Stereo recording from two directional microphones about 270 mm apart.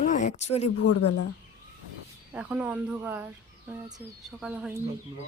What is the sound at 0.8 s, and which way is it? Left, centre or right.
Speech, left.